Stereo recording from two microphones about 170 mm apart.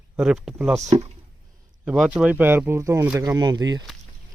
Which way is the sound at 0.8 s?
40° right (ahead or behind).